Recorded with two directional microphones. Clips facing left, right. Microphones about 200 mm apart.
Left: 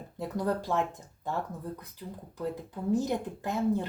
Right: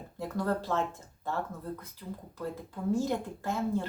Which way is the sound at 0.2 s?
15° left (ahead or behind).